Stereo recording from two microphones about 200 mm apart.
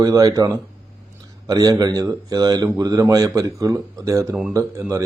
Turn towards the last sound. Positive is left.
turn(degrees=-15)  # may be behind; listen again after turning